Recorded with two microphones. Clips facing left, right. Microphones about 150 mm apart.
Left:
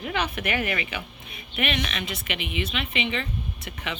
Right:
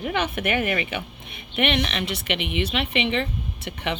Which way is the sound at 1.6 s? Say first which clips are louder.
Right 5 dB; 65° right (ahead or behind).